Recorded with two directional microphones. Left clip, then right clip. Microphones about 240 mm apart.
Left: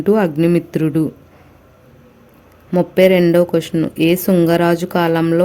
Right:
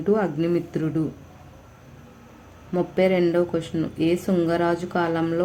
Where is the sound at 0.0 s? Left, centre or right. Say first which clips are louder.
Left 8 dB; left.